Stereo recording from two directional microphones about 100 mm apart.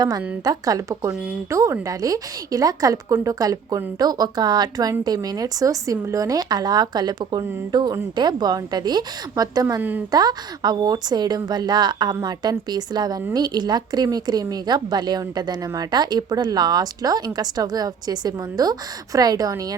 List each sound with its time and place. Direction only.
0.0 s speech: 40° right (ahead or behind)